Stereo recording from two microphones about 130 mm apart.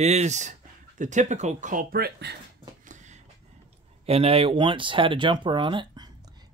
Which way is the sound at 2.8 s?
70° right (ahead or behind).